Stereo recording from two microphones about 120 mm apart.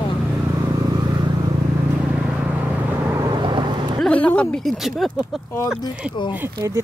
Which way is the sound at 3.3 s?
40° right (ahead or behind).